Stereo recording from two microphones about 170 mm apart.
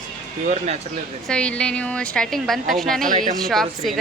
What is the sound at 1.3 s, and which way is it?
A woman's voice, 5° left (ahead or behind).